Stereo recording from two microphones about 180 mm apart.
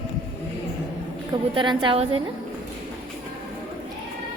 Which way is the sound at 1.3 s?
25° right (ahead or behind).